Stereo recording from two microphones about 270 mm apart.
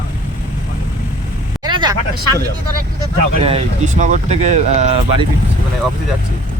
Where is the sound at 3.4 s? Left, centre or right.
Right.